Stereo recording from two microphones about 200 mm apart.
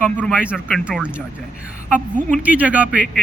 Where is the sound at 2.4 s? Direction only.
5° right (ahead or behind).